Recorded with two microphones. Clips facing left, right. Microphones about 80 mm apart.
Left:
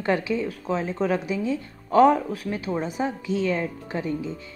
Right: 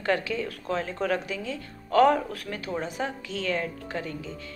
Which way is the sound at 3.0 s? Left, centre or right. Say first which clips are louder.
Left 6 dB; centre.